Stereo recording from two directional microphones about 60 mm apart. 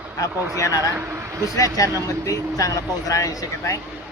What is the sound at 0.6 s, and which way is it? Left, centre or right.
Speech, left.